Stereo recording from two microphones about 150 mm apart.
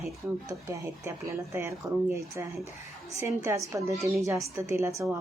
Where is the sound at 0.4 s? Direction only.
20° right (ahead or behind).